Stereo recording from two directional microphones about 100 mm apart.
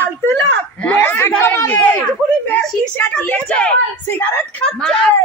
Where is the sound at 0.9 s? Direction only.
20° left (ahead or behind).